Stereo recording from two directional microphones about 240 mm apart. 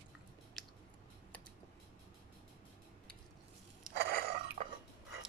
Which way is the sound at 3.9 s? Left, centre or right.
Right.